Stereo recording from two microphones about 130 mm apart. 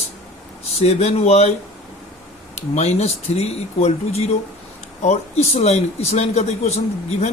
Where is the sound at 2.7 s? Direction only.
60° left (ahead or behind).